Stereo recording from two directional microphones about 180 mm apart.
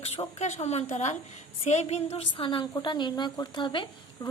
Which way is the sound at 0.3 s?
40° left (ahead or behind).